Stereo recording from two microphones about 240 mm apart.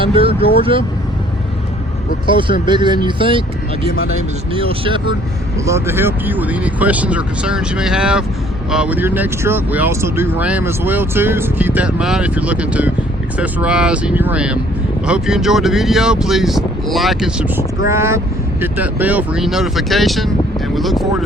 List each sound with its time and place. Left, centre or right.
0.0 s speech: right
2.3 s speech: centre
4.5 s speech: right
5.6 s speech: centre